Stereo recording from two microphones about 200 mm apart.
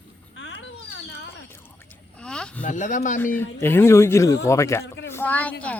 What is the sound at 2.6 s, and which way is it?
Speech, 40° left (ahead or behind).